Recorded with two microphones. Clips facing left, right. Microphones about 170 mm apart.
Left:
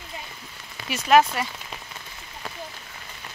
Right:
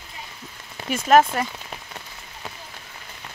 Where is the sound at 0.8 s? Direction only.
45° right (ahead or behind).